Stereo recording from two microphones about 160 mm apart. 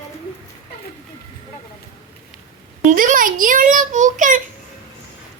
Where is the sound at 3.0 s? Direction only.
60° right (ahead or behind).